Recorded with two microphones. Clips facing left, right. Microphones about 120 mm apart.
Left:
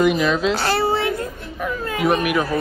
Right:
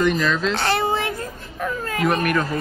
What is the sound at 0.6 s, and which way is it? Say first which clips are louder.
Speech: left 1 dB; 30° left (ahead or behind).